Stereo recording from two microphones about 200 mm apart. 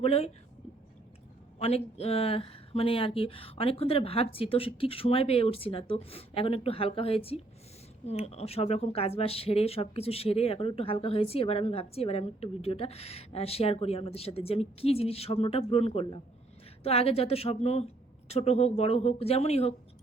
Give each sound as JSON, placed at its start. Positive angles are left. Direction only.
{"t": 0.0, "sound": "speech", "side_deg": 30}
{"t": 1.5, "sound": "speech", "side_deg": 30}